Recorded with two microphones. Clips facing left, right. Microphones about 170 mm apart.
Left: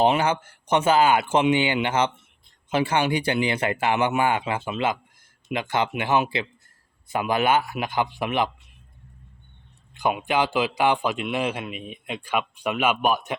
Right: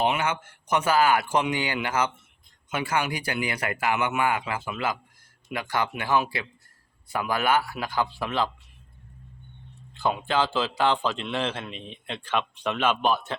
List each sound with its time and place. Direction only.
0.0 s a man's voice: 35° left (ahead or behind); by 8.4 s 15° left (ahead or behind)
9.9 s a man's voice: 15° left (ahead or behind)